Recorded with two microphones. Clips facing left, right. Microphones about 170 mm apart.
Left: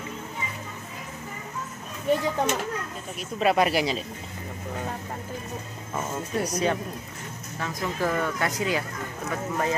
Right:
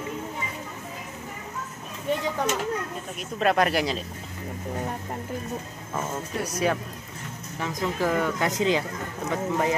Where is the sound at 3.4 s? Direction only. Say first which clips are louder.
Even; 5° left (ahead or behind).